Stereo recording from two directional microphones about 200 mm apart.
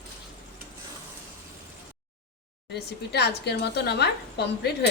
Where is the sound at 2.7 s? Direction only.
55° left (ahead or behind).